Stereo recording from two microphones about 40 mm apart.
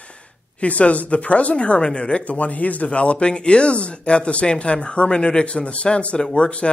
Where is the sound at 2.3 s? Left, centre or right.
Left.